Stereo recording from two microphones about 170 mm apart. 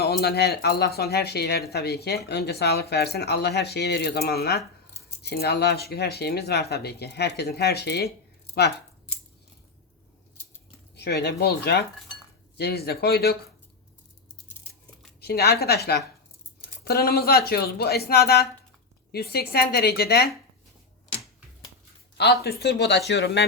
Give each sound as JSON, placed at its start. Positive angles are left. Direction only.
{"t": 0.0, "sound": "speech", "side_deg": 70}
{"t": 10.9, "sound": "speech", "side_deg": 75}
{"t": 15.2, "sound": "speech", "side_deg": 70}
{"t": 22.4, "sound": "speech", "side_deg": 80}